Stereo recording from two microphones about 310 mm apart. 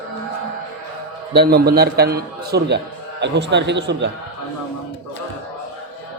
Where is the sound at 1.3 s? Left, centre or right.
Right.